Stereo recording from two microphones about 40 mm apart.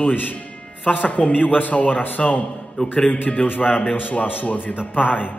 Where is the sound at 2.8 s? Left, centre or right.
Left.